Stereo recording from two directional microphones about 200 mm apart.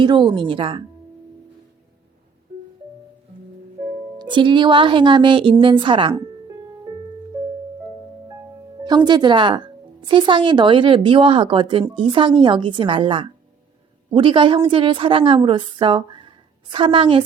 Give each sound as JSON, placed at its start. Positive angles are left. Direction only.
{"t": 0.0, "sound": "speech", "side_deg": -25}
{"t": 4.2, "sound": "speech", "side_deg": -25}
{"t": 6.1, "sound": "music", "side_deg": -15}
{"t": 8.3, "sound": "music", "side_deg": -20}
{"t": 9.0, "sound": "a woman's voice", "side_deg": -20}